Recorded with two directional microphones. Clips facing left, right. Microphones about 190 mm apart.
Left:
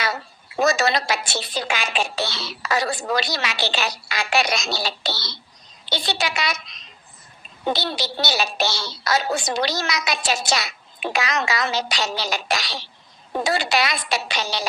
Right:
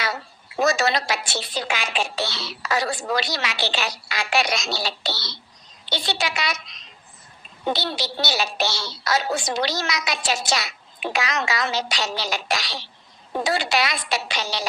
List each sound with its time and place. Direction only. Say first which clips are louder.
0.6 s a woman's voice: left 1 dB; 45° left (ahead or behind)
7.7 s a woman's voice: left 1 dB; 45° left (ahead or behind)